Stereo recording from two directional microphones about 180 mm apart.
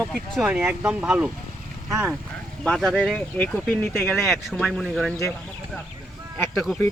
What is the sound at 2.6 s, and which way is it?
Speech, centre (ahead or behind).